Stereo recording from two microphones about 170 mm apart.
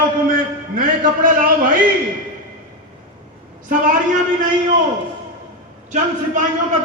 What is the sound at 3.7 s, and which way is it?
Speech, 50° right (ahead or behind).